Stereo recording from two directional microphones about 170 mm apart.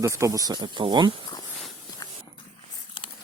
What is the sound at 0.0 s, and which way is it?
Speech, 20° right (ahead or behind).